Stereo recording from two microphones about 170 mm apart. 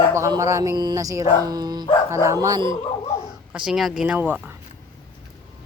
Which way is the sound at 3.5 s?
5° right (ahead or behind).